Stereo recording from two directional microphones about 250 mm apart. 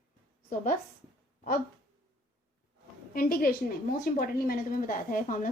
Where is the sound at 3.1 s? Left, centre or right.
Left.